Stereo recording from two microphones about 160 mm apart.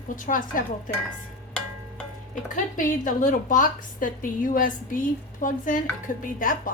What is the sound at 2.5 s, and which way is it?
A woman's voice, 55° left (ahead or behind).